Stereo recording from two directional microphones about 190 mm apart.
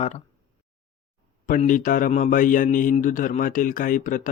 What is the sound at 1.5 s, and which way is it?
A man's voice, 45° left (ahead or behind).